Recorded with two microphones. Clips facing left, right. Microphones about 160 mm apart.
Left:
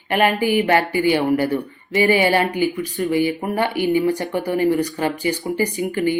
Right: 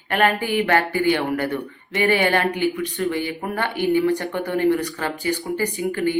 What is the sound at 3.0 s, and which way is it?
Speech, 15° left (ahead or behind).